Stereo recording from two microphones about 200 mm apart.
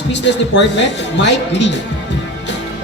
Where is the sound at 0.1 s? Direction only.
60° left (ahead or behind).